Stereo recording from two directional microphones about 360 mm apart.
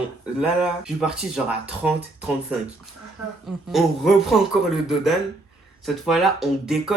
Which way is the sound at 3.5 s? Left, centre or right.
Centre.